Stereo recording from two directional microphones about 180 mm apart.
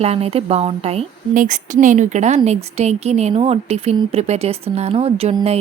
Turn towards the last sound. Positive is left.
turn(degrees=-35)  # may be behind; listen again after turning